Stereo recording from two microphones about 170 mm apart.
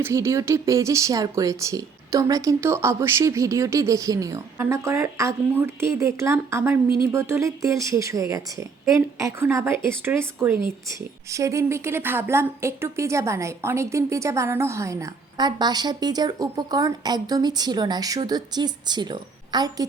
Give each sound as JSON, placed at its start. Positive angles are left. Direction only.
{"t": 0.0, "sound": "speech", "side_deg": -15}